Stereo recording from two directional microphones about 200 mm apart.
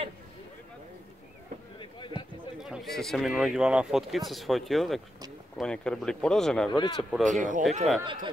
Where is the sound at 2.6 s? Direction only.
Centre (ahead or behind).